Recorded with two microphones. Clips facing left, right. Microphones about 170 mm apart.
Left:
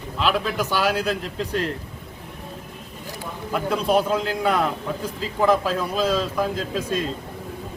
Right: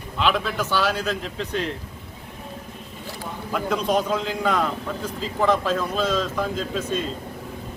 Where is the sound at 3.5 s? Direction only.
5° left (ahead or behind).